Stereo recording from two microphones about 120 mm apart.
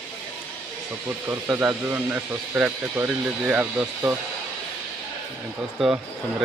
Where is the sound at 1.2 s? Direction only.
20° right (ahead or behind).